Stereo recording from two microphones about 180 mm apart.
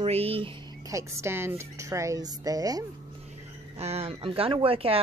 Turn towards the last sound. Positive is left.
turn(degrees=-30)  # may be behind; listen again after turning